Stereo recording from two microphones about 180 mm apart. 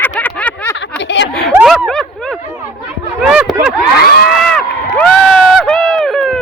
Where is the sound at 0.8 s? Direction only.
80° left.